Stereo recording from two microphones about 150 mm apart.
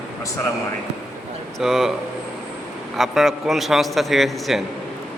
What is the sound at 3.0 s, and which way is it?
A man's voice, centre (ahead or behind).